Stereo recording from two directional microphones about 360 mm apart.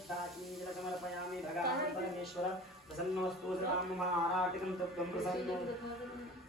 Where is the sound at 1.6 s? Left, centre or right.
Right.